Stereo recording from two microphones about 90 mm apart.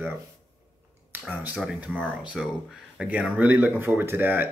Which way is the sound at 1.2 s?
20° right (ahead or behind).